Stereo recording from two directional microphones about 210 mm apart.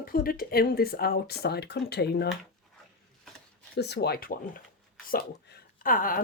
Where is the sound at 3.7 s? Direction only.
50° left (ahead or behind).